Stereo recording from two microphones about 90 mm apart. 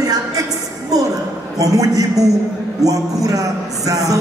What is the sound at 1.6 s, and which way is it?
A man's voice, 40° right (ahead or behind).